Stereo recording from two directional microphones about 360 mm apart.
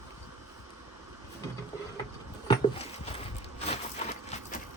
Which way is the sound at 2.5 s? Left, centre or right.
Centre.